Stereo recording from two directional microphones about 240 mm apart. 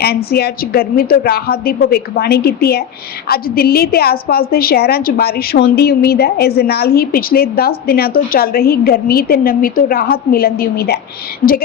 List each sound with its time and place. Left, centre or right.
0.0 s a woman's voice: left